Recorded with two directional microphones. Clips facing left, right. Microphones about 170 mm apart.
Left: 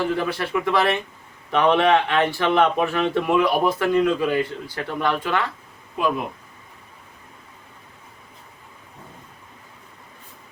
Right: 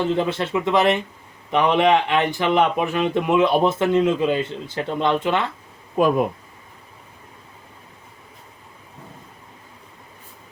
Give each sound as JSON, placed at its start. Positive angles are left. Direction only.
{"t": 0.0, "sound": "speech", "side_deg": -20}
{"t": 6.0, "sound": "speech", "side_deg": -45}